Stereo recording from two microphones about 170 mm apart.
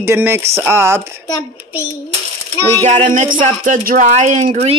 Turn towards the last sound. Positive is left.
turn(degrees=-45)  # may be behind; listen again after turning